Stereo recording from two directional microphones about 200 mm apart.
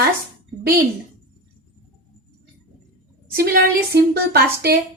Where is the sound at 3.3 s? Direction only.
50° right (ahead or behind).